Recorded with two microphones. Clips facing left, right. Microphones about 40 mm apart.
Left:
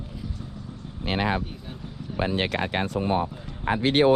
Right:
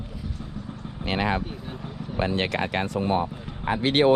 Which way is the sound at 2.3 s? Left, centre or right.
Right.